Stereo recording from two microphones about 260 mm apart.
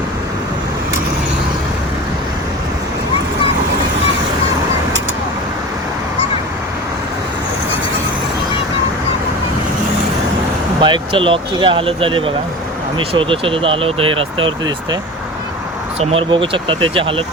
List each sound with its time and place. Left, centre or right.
10.8 s speech: centre
16.0 s speech: right